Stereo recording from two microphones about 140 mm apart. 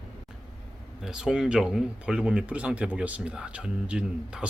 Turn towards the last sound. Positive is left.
turn(degrees=-5)  # may be behind; listen again after turning